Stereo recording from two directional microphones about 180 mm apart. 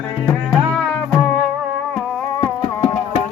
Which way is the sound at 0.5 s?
Centre (ahead or behind).